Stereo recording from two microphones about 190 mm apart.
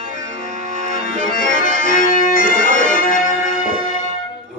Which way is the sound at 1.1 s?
45° left (ahead or behind).